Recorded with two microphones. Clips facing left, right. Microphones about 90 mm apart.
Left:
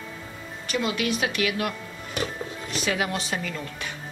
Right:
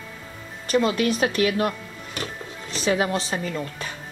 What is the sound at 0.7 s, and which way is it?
Speech, 35° right (ahead or behind).